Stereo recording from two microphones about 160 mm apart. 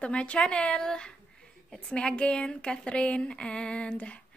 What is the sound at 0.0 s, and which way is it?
A woman's voice, 5° left (ahead or behind).